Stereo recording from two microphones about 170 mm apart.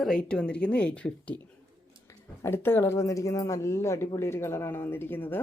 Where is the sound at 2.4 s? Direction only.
15° left (ahead or behind).